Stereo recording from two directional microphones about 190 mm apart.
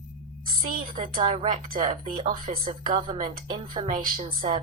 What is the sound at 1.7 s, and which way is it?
Speech, 45° right (ahead or behind).